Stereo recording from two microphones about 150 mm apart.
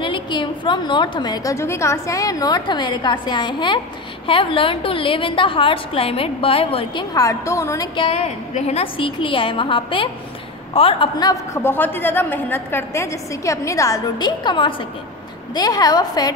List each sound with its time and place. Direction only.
0.0 s a woman's voice: 30° left (ahead or behind)
7.2 s a woman's voice: 20° left (ahead or behind)
11.6 s a woman's voice: 15° left (ahead or behind)